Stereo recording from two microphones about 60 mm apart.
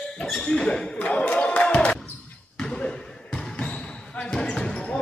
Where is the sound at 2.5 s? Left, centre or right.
Centre.